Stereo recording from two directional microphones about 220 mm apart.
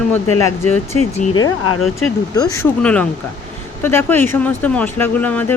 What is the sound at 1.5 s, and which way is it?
Speech, 80° left.